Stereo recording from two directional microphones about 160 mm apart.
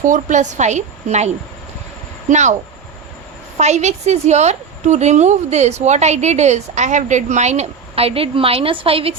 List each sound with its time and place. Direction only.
0.0 s a woman's voice: 50° right (ahead or behind)
2.3 s a woman's voice: 50° right (ahead or behind)
3.6 s a woman's voice: 45° right (ahead or behind)